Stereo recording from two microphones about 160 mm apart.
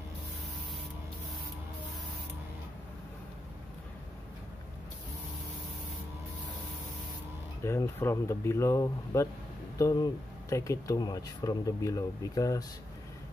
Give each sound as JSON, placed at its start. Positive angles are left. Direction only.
{"t": 7.6, "sound": "speech", "side_deg": 15}